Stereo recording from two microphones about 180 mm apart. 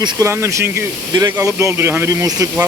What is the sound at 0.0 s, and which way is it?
Speech, 15° right (ahead or behind).